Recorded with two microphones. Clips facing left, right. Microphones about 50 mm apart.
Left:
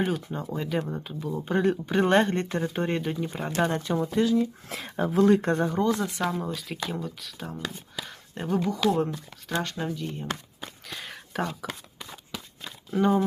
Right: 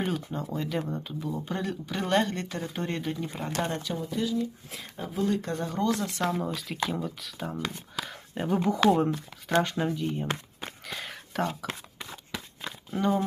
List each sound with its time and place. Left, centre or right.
0.0 s speech: centre
1.5 s speech: left
3.6 s speech: left
5.3 s speech: left
5.6 s speech: left
6.3 s speech: centre
8.9 s speech: right
10.8 s a sound: centre
13.0 s speech: centre